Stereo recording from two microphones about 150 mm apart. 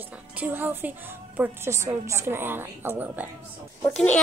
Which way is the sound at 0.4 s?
15° right (ahead or behind).